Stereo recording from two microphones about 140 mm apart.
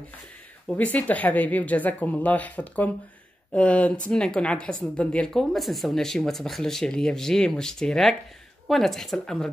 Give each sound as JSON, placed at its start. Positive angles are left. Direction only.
{"t": 0.7, "sound": "a woman's voice", "side_deg": 10}